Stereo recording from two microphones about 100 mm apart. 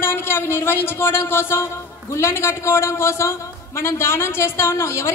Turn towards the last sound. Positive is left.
turn(degrees=25)  # may be behind; listen again after turning